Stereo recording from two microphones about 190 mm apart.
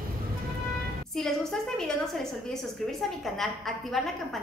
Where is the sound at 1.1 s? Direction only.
Centre (ahead or behind).